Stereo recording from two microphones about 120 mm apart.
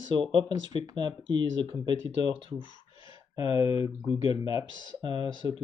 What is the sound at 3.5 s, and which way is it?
Speech, 30° right (ahead or behind).